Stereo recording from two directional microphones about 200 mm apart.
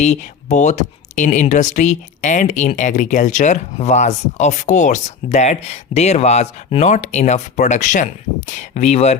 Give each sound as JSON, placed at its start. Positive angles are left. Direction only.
{"t": 0.0, "sound": "speech", "side_deg": 35}